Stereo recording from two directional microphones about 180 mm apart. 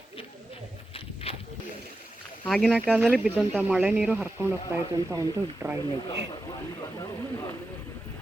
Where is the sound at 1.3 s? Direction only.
35° left (ahead or behind).